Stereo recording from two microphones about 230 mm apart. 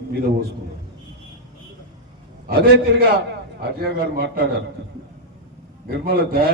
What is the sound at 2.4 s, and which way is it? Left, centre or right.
A man's voice, right.